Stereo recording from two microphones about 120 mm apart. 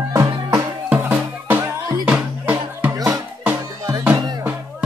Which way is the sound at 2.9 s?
30° right (ahead or behind).